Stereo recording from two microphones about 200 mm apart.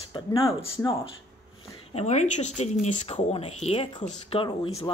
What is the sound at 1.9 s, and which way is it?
Speech, 35° left (ahead or behind).